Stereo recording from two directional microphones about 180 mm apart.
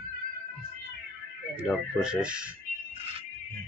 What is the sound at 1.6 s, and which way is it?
Speech, 5° right (ahead or behind).